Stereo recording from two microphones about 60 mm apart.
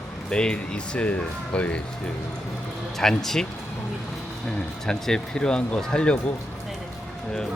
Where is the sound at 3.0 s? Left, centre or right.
Centre.